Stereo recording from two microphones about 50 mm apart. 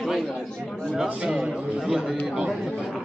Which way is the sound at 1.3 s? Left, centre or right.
Centre.